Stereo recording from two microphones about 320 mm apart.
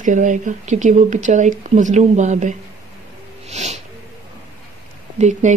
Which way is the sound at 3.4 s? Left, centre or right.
Right.